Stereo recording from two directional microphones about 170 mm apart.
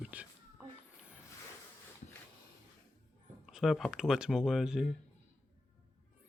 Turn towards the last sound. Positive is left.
turn(degrees=-5)  # may be behind; listen again after turning